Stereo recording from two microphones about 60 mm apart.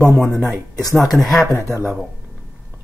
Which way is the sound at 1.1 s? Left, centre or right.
Centre.